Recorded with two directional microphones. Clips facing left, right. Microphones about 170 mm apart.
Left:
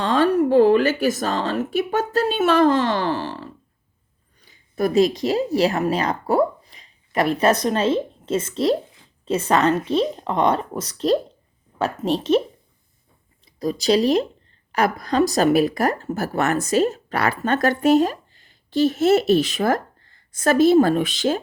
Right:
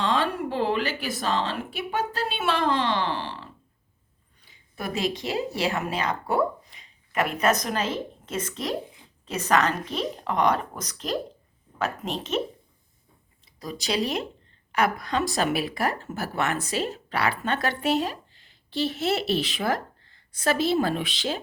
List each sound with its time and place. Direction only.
0.0 s a woman's voice: 45° left (ahead or behind)
13.4 s speech: 40° left (ahead or behind)